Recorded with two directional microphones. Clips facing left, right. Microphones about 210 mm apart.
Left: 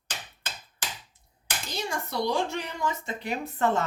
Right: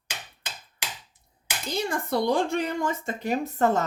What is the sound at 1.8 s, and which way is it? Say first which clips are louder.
Speech: right 4 dB; 55° right (ahead or behind).